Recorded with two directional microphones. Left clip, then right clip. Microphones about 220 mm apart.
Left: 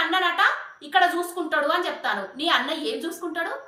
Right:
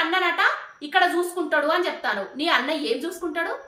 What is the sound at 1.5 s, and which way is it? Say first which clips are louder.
A woman's voice: right 1 dB; 15° right (ahead or behind).